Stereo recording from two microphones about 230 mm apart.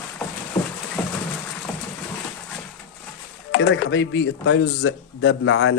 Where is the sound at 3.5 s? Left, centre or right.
Left.